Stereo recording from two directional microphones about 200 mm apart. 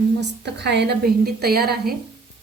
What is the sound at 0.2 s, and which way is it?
A woman's voice, 60° right (ahead or behind).